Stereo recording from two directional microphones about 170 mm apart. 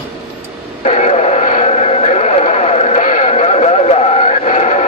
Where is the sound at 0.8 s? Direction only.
40° left (ahead or behind).